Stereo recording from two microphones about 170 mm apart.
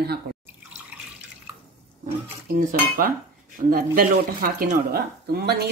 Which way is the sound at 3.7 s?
55° right (ahead or behind).